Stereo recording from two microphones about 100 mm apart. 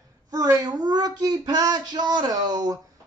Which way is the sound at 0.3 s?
35° right (ahead or behind).